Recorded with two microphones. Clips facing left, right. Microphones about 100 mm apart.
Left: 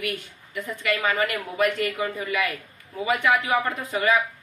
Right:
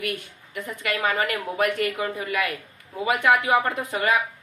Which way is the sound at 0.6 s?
55° right (ahead or behind).